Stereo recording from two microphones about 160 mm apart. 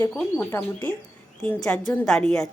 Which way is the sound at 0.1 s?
5° left (ahead or behind).